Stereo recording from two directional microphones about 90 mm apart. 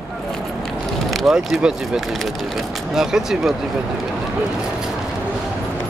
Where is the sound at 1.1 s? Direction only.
Centre (ahead or behind).